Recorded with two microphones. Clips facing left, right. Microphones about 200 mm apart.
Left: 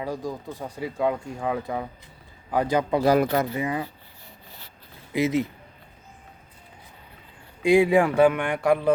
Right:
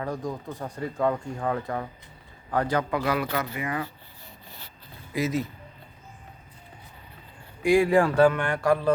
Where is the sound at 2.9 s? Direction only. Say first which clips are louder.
Left 6 dB; 40° left (ahead or behind).